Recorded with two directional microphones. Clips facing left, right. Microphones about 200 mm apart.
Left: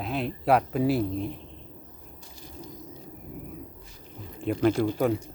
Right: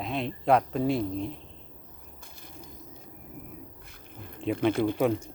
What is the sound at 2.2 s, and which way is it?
Crushing, 55° right (ahead or behind).